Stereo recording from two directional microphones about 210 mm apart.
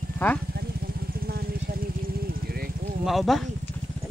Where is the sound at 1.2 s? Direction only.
45° right (ahead or behind).